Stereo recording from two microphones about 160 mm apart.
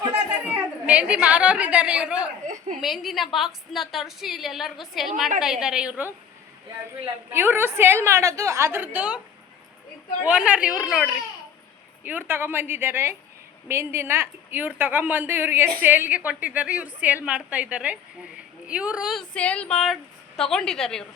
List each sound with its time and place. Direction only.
0.1 s a woman's voice: 10° right (ahead or behind)
10.2 s a woman's voice: 5° right (ahead or behind)